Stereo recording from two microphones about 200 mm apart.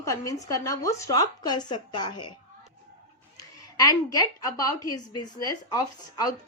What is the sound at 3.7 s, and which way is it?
A woman's voice, 20° left (ahead or behind).